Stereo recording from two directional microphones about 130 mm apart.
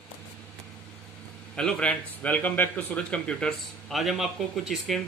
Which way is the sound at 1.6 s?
5° left (ahead or behind).